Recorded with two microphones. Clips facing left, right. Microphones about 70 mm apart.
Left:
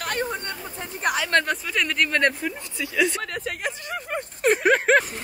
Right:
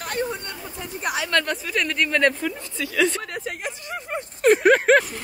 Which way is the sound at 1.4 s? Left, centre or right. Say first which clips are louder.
Even; centre.